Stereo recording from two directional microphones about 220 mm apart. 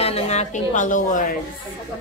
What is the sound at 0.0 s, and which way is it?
A woman's voice, 30° left (ahead or behind).